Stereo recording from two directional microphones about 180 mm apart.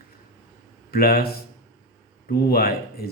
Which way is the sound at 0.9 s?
55° left (ahead or behind).